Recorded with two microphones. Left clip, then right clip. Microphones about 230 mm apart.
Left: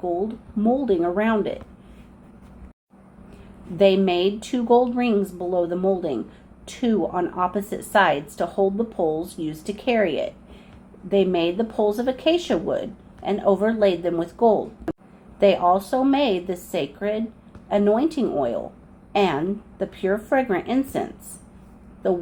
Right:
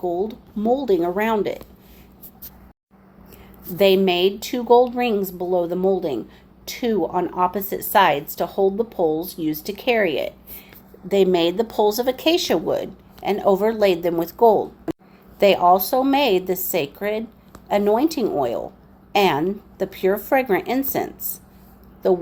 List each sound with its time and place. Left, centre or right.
0.0 s speech: right
3.8 s speech: right